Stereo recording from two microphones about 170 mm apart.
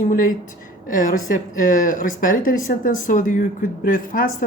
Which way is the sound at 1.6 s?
50° left (ahead or behind).